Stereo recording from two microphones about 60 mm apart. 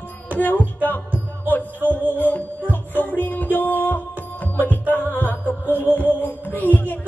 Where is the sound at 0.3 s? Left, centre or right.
Left.